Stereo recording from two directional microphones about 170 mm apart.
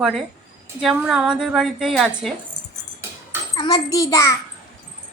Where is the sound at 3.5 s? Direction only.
25° left (ahead or behind).